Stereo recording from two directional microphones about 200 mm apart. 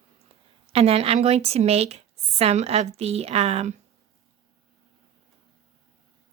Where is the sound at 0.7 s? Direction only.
30° right (ahead or behind).